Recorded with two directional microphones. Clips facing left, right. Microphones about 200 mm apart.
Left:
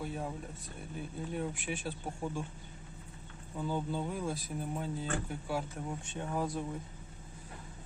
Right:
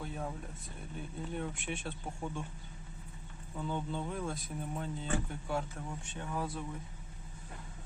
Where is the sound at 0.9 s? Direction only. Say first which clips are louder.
Left 2 dB; 5° left (ahead or behind).